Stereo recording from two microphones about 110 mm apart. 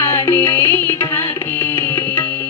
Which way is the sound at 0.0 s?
25° left (ahead or behind).